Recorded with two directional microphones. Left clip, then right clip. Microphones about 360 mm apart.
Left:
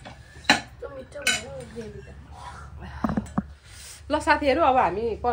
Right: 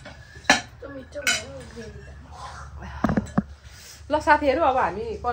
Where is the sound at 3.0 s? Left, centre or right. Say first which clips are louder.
Right 4 dB; right.